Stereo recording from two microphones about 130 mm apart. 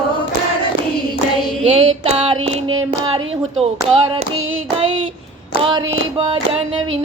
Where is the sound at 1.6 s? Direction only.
50° right (ahead or behind).